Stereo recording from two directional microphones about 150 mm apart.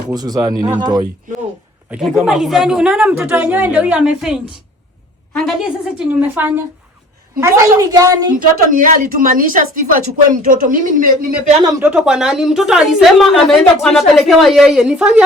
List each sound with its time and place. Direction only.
0.1 s a woman's voice: 25° right (ahead or behind)
1.9 s a woman's voice: 5° right (ahead or behind)
5.4 s a woman's voice: 5° right (ahead or behind); by 8.3 s 25° right (ahead or behind)
8.7 s a woman's voice: 65° right (ahead or behind)
11.8 s a woman's voice: 5° right (ahead or behind)